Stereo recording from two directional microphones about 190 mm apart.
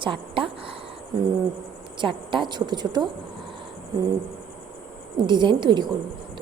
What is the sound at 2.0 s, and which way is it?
A woman's voice, 25° right (ahead or behind).